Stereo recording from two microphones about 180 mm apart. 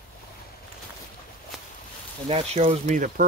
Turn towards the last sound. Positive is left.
turn(degrees=-45)  # may be behind; listen again after turning